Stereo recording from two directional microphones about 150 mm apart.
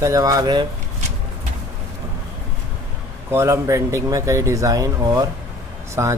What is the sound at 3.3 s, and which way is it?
Speech, 20° right (ahead or behind).